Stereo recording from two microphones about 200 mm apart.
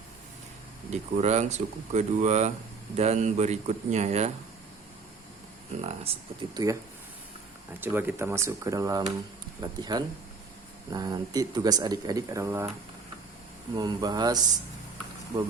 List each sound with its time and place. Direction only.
0.9 s speech: 35° right (ahead or behind)
5.7 s speech: 35° right (ahead or behind)
6.5 s speech: 20° right (ahead or behind)
13.7 s speech: 20° right (ahead or behind)